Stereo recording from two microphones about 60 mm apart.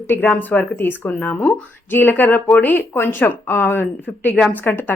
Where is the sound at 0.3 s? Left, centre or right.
Left.